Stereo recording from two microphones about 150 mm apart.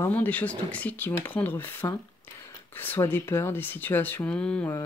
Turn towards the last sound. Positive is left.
turn(degrees=5)  # may be behind; listen again after turning